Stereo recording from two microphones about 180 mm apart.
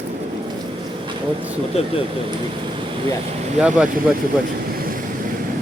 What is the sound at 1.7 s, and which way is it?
Speech, 35° left (ahead or behind).